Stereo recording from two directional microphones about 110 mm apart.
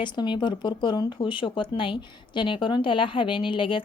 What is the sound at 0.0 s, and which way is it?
Speech, 45° left (ahead or behind).